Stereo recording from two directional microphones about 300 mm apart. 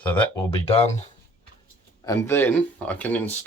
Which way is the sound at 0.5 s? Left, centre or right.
Centre.